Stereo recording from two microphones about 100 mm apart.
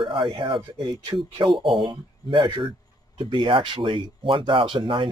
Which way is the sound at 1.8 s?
50° right (ahead or behind).